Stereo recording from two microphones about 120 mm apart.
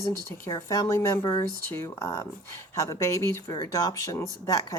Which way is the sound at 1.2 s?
30° left (ahead or behind).